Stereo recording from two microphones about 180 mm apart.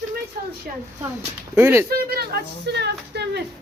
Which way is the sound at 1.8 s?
55° right (ahead or behind).